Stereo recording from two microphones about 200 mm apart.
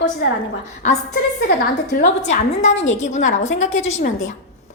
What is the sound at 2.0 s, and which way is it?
A woman's voice, 35° left (ahead or behind).